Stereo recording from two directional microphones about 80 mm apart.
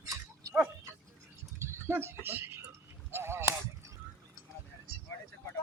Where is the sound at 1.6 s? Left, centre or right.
Right.